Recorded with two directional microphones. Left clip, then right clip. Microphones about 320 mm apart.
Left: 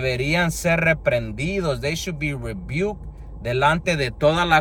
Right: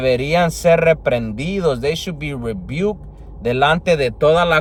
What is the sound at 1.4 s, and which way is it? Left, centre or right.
Speech, right.